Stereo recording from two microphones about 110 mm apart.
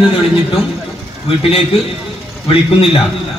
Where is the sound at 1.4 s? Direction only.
60° left (ahead or behind).